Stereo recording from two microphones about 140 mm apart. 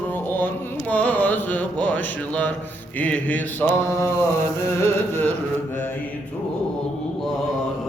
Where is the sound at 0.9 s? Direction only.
10° left (ahead or behind).